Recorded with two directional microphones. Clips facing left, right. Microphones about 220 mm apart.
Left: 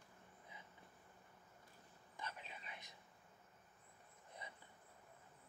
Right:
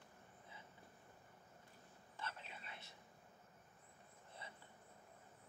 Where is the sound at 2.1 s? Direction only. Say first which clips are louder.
Even; 15° left (ahead or behind).